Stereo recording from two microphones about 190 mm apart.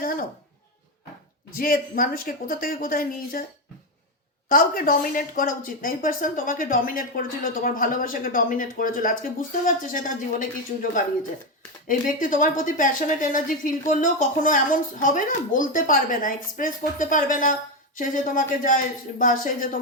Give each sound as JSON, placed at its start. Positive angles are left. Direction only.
{"t": 0.0, "sound": "a sound", "side_deg": 50}
{"t": 1.5, "sound": "speech", "side_deg": 50}
{"t": 4.4, "sound": "speech", "side_deg": 50}
{"t": 11.9, "sound": "speech", "side_deg": 45}